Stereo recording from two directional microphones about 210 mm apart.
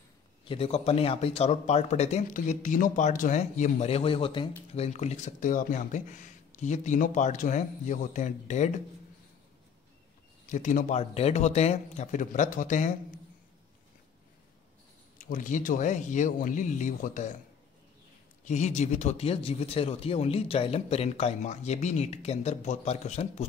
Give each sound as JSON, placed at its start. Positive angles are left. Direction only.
{"t": 0.5, "sound": "speech", "side_deg": 30}
{"t": 10.5, "sound": "speech", "side_deg": 35}
{"t": 15.1, "sound": "speech", "side_deg": 40}
{"t": 18.4, "sound": "speech", "side_deg": 35}